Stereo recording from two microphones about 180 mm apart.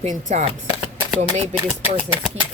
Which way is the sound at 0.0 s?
40° right (ahead or behind).